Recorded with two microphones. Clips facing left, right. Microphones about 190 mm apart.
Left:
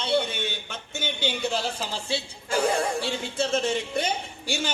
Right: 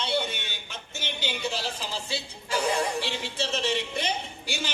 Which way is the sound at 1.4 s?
55° left (ahead or behind).